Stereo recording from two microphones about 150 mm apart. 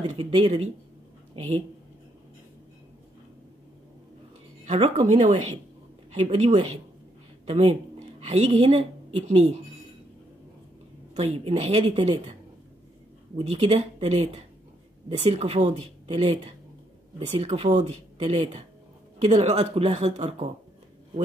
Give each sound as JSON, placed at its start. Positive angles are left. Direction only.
{"t": 0.2, "sound": "a woman's voice", "side_deg": -45}
{"t": 4.6, "sound": "speech", "side_deg": -45}
{"t": 11.1, "sound": "speech", "side_deg": -45}
{"t": 13.4, "sound": "speech", "side_deg": -45}